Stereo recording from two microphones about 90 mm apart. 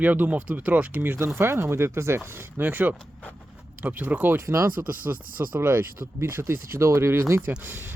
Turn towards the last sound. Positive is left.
turn(degrees=-20)  # may be behind; listen again after turning